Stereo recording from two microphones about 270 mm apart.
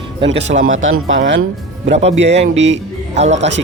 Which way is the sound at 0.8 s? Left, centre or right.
Right.